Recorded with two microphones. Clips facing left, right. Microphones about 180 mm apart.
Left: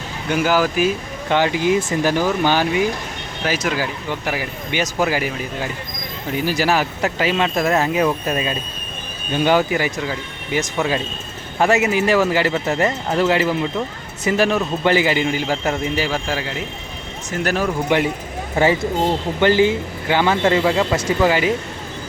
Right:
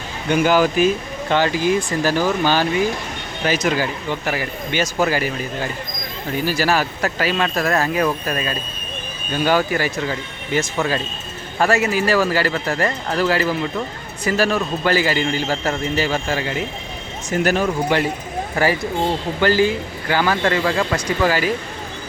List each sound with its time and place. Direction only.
0.3 s speech: 5° left (ahead or behind)
3.4 s speech: 5° left (ahead or behind)
17.9 s speech: 20° left (ahead or behind)